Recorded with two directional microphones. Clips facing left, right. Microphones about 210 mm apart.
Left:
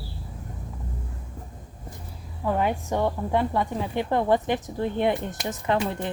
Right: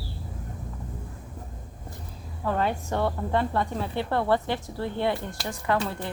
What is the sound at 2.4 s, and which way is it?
Speech, 15° left (ahead or behind).